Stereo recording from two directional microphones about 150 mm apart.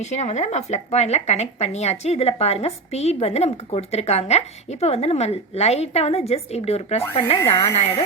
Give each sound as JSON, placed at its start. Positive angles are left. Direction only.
{"t": 0.0, "sound": "speech", "side_deg": 50}